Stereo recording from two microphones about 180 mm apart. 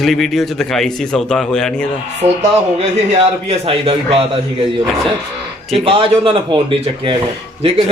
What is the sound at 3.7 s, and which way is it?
Speech, 30° right (ahead or behind).